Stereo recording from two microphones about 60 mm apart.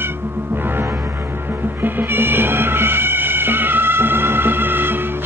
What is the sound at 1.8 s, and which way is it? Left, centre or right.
Music, right.